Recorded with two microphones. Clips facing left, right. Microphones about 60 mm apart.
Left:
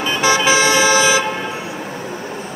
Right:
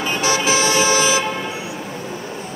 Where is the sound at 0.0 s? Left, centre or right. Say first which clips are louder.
Left 4 dB; left.